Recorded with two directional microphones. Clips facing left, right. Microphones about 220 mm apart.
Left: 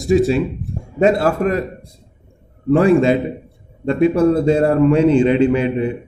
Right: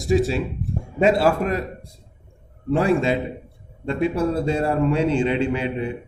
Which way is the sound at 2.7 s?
55° left (ahead or behind).